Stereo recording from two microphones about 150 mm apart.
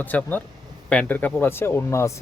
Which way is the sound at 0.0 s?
10° left (ahead or behind).